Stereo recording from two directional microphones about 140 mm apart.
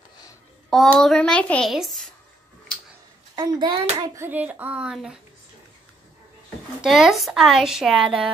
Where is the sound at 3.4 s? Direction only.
30° right (ahead or behind).